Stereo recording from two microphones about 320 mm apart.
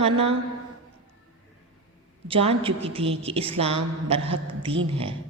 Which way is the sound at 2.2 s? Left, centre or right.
Centre.